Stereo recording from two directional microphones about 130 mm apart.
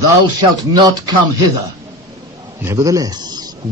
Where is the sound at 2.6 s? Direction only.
25° right (ahead or behind).